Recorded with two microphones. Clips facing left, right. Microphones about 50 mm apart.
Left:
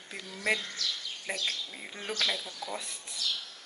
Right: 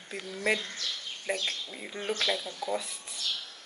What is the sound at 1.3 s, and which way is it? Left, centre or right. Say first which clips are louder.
Speech: right 3 dB; right.